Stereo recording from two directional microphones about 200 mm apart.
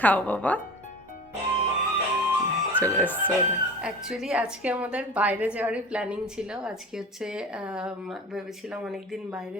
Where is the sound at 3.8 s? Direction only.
5° right (ahead or behind).